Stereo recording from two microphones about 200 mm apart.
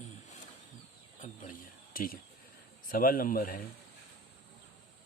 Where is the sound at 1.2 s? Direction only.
35° left (ahead or behind).